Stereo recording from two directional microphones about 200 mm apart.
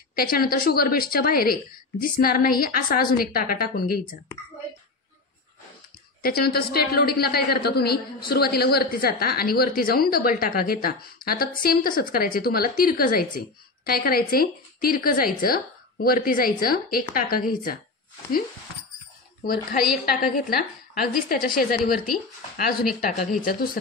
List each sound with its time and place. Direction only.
0.1 s a woman's voice: 50° left (ahead or behind)
6.2 s a woman's voice: 50° left (ahead or behind)
19.4 s a woman's voice: 45° left (ahead or behind)
21.9 s speech: centre (ahead or behind)
22.9 s a woman's voice: 45° left (ahead or behind)